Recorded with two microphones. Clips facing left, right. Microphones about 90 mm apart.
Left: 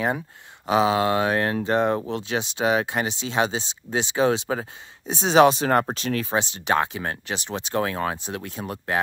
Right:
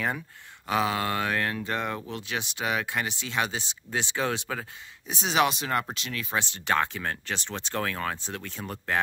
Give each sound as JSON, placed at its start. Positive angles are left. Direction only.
{"t": 0.7, "sound": "speech", "side_deg": 20}
{"t": 6.3, "sound": "speech", "side_deg": 20}